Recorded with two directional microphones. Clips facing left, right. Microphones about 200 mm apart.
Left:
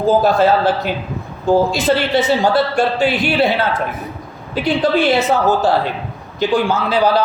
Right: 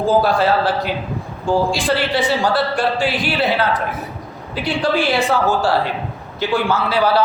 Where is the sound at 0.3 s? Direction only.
20° left (ahead or behind).